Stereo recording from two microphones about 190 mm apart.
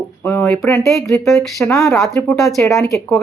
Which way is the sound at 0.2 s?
10° left (ahead or behind).